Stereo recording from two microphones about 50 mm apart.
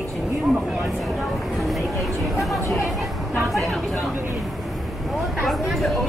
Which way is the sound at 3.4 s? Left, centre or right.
Centre.